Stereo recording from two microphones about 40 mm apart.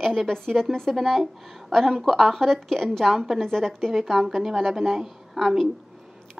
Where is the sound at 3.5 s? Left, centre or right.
Centre.